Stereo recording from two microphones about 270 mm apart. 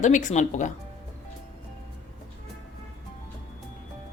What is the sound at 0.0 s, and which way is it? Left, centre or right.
Speech, left.